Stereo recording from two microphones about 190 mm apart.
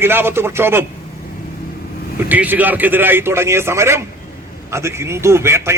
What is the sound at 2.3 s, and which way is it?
Speech, 10° right (ahead or behind).